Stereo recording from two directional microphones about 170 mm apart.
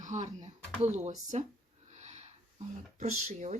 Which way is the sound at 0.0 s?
45° right (ahead or behind).